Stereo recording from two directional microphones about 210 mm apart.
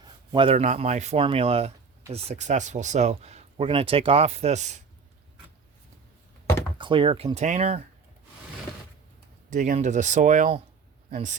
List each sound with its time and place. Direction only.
0.0 s speech: 25° right (ahead or behind)
6.7 s speech: 25° right (ahead or behind)
9.5 s speech: 35° right (ahead or behind)